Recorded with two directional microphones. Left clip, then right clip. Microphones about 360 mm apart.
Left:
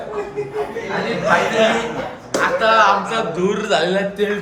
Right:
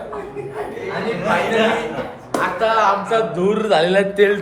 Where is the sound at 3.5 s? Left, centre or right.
Centre.